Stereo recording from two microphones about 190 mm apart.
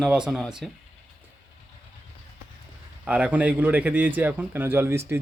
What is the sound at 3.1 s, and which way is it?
Speech, 5° right (ahead or behind).